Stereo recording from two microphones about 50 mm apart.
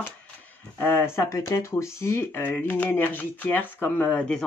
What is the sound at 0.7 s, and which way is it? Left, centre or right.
Speech, left.